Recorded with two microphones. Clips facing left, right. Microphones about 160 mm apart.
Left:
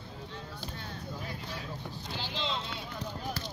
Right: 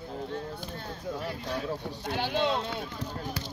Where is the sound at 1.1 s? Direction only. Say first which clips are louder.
Right 9 dB; 70° right (ahead or behind).